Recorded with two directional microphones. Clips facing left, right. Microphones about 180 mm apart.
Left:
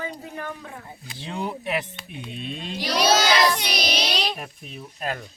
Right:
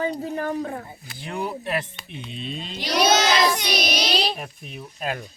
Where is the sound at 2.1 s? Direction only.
55° left (ahead or behind).